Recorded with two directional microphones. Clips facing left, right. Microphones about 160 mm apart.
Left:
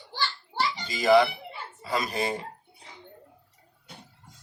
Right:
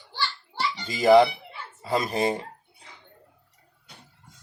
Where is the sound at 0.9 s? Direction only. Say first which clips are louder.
Right 4 dB; 30° right (ahead or behind).